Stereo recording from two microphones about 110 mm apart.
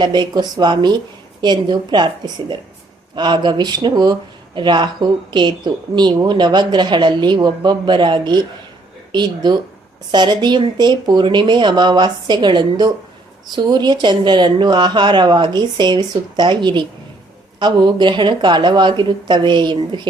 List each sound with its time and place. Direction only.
0.0 s a woman's voice: 40° right (ahead or behind)